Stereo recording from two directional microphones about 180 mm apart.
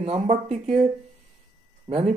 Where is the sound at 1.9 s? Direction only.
35° right (ahead or behind).